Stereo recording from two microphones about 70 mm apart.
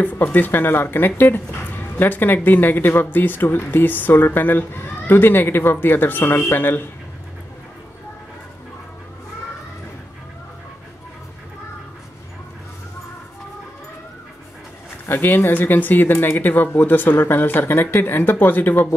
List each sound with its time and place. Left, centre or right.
0.0 s speech: left
15.0 s speech: left